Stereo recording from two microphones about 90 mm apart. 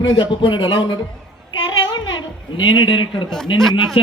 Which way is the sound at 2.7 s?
60° left (ahead or behind).